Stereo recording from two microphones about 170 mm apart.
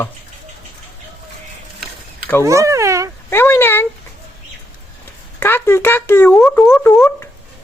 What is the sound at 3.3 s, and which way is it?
Speech, 15° left (ahead or behind).